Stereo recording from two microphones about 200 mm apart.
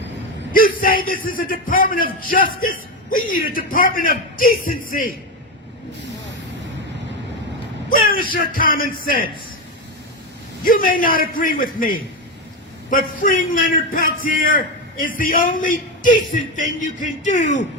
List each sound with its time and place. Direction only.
0.5 s a man's voice: 45° left (ahead or behind)
7.9 s a man's voice: 45° left (ahead or behind)
10.6 s a man's voice: 45° left (ahead or behind)